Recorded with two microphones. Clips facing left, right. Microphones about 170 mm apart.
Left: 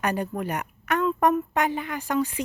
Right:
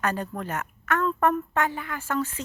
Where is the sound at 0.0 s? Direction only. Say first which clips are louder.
Left 2 dB; 15° left (ahead or behind).